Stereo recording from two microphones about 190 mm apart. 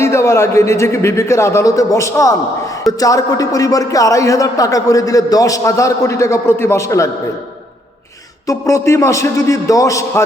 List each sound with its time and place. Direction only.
0.0 s a man's voice: 15° left (ahead or behind)
8.4 s a man's voice: 15° left (ahead or behind)